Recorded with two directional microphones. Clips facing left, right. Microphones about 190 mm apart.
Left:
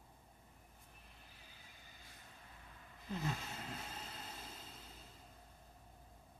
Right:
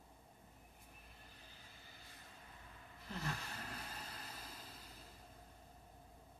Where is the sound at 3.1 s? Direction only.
20° left (ahead or behind).